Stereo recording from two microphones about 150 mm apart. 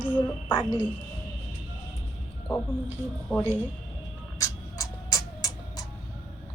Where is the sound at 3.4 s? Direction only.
15° right (ahead or behind).